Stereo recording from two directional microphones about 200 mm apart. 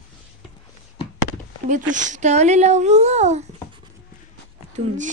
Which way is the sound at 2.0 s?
40° right (ahead or behind).